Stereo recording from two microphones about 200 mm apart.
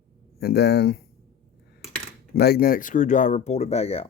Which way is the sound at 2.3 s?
55° left (ahead or behind).